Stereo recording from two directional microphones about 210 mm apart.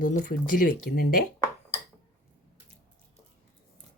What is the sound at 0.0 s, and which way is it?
Speech, 40° left (ahead or behind).